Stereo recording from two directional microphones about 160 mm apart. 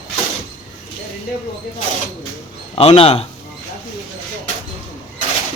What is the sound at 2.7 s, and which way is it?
Speech, 35° left (ahead or behind).